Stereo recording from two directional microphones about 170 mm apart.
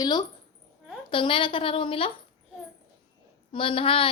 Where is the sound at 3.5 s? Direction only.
30° left (ahead or behind).